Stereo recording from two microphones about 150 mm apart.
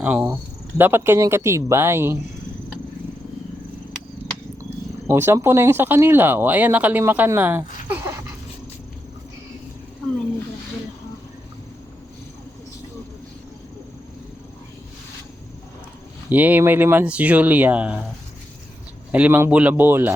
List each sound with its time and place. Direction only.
0.0 s speech: 10° right (ahead or behind)
5.0 s speech: 15° right (ahead or behind)
16.3 s speech: 10° right (ahead or behind)
19.1 s speech: 10° right (ahead or behind)